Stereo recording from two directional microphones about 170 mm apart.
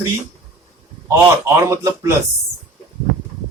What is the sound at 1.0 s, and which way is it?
A man's voice, 20° right (ahead or behind).